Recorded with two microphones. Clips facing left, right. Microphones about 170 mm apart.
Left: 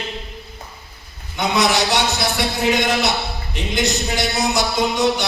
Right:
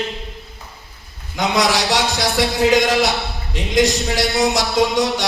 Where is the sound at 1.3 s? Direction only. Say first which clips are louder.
Even; 90° right.